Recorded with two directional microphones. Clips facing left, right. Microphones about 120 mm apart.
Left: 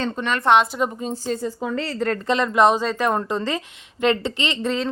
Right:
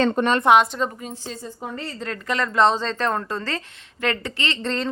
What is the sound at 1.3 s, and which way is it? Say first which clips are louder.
Speech: left 9 dB; 80° left.